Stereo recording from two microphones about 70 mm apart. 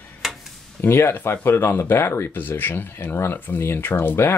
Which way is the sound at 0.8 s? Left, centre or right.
Left.